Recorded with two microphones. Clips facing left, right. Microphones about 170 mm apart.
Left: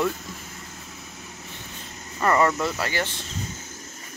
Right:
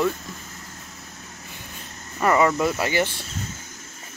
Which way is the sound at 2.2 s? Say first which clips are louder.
Right 2 dB; 10° right (ahead or behind).